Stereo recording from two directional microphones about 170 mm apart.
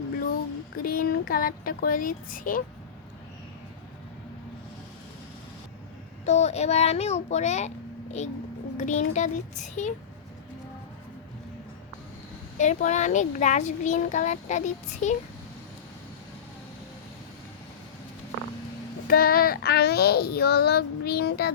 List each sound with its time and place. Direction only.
0.8 s speech: 55° left (ahead or behind)
6.2 s a child's voice: 40° left (ahead or behind)
8.8 s a child's voice: 45° left (ahead or behind)
12.5 s a child's voice: 45° left (ahead or behind)
19.0 s a child's voice: 60° left (ahead or behind)